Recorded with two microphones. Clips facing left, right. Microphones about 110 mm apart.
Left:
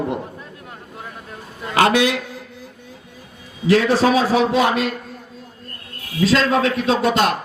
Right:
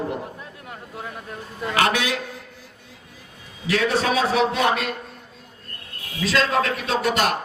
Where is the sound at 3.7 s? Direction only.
35° left (ahead or behind).